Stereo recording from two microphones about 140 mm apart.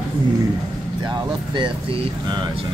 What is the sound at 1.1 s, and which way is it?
Speech, 35° right (ahead or behind).